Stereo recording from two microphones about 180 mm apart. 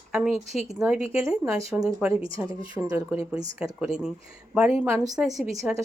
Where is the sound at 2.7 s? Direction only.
20° right (ahead or behind).